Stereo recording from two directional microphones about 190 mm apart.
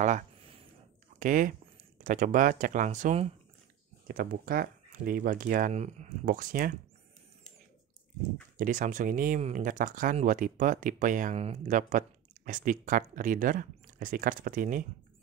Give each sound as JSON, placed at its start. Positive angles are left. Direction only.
{"t": 0.0, "sound": "a sound", "side_deg": -40}
{"t": 1.2, "sound": "speech", "side_deg": -45}
{"t": 4.1, "sound": "speech", "side_deg": -50}
{"t": 8.5, "sound": "speech", "side_deg": -45}